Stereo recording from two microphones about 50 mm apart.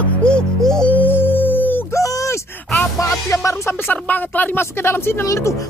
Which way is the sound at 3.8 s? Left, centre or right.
Left.